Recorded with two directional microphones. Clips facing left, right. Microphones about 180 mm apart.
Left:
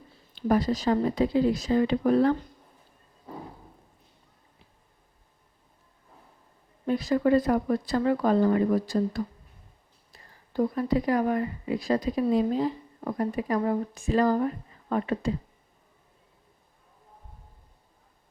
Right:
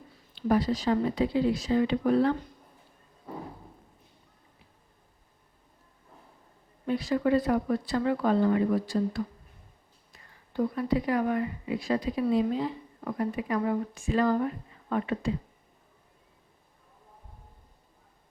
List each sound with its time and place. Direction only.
0.4 s speech: 45° left (ahead or behind)
6.8 s speech: 40° left (ahead or behind)